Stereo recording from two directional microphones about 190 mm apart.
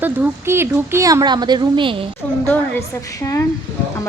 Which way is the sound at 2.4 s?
10° left (ahead or behind).